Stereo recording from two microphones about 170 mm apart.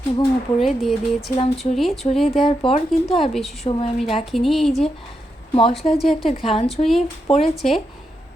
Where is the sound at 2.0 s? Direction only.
30° left (ahead or behind).